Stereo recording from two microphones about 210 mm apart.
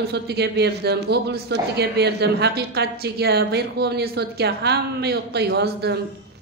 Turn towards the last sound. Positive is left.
turn(degrees=-55)  # may be behind; listen again after turning